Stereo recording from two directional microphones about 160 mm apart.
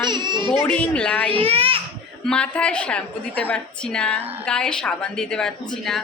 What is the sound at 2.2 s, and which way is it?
A woman's voice, 5° left (ahead or behind).